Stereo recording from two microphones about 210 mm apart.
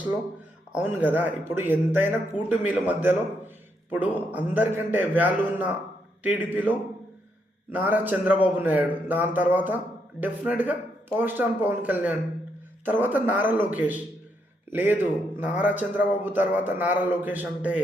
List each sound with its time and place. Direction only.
0.8 s a man's voice: 10° right (ahead or behind)